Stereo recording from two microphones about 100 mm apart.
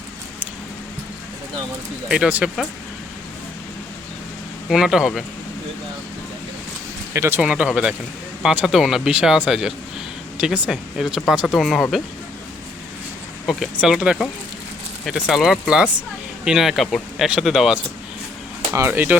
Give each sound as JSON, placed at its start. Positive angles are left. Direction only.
{"t": 2.0, "sound": "speech", "side_deg": -10}
{"t": 4.7, "sound": "speech", "side_deg": -5}
{"t": 7.1, "sound": "speech", "side_deg": -25}
{"t": 7.4, "sound": "speech", "side_deg": -10}
{"t": 13.5, "sound": "speech", "side_deg": -5}
{"t": 18.7, "sound": "speech", "side_deg": -25}